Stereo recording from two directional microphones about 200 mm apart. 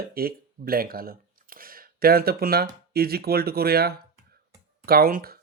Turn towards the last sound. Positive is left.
turn(degrees=-50)  # may be behind; listen again after turning